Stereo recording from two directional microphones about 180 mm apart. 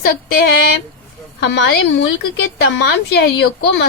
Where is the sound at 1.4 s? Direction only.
75° left (ahead or behind).